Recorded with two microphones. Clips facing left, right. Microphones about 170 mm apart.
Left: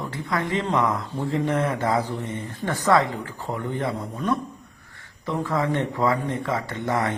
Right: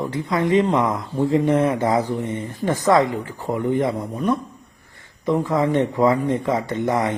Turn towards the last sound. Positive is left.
turn(degrees=-15)  # may be behind; listen again after turning